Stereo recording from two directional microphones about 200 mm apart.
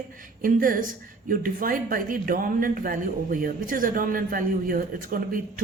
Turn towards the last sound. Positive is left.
turn(degrees=-45)  # may be behind; listen again after turning